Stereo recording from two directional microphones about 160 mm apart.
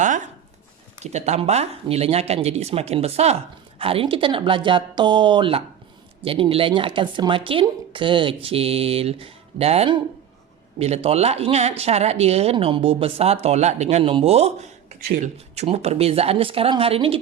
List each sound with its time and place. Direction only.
1.0 s speech: 45° right (ahead or behind)